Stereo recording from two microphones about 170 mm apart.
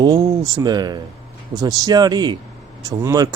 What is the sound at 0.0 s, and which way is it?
Speech, 25° right (ahead or behind).